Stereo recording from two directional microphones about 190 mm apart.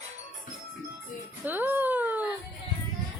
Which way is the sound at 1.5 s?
10° right (ahead or behind).